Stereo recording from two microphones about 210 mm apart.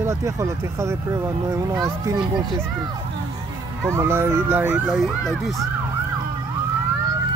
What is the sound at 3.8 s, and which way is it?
Speech, 10° right (ahead or behind).